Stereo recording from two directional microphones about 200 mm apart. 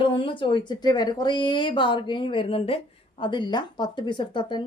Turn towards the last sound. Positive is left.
turn(degrees=25)  # may be behind; listen again after turning